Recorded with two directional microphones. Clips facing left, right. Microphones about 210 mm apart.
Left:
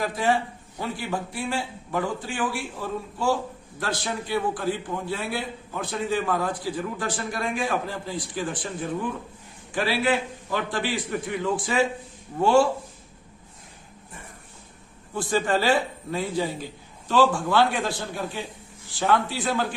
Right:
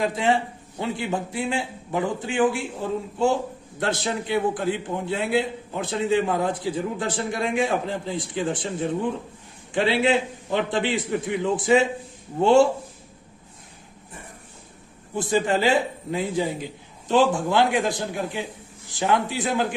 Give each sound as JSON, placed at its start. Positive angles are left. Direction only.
{"t": 0.0, "sound": "a man's voice", "side_deg": -25}
{"t": 15.1, "sound": "a man's voice", "side_deg": -20}